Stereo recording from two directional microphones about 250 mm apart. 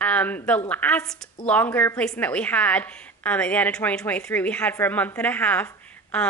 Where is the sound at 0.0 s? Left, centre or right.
Centre.